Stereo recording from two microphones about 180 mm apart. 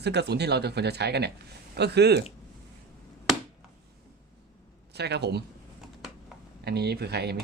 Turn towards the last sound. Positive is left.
turn(degrees=-65)  # may be behind; listen again after turning